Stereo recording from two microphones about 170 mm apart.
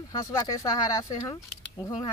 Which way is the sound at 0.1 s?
20° left (ahead or behind).